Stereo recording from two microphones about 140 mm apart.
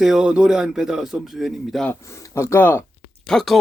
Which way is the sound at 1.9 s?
20° left (ahead or behind).